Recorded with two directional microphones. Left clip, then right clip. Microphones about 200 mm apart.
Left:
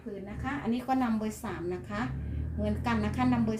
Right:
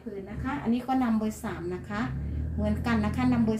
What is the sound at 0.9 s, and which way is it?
A woman's voice, 20° left (ahead or behind).